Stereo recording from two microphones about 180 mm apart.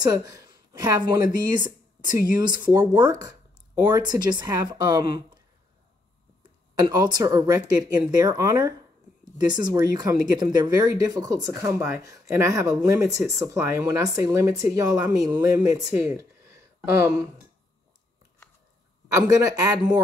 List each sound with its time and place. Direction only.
0.0 s a woman's voice: 20° right (ahead or behind)
6.8 s speech: 25° right (ahead or behind)
19.1 s speech: 20° right (ahead or behind)